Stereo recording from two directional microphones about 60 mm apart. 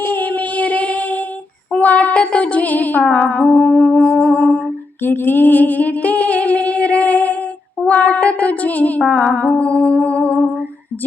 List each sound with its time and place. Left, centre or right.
0.0 s music: left
1.8 s a sound: left
3.2 s music: left
5.0 s a sound: left
7.9 s female singing: left
9.3 s music: left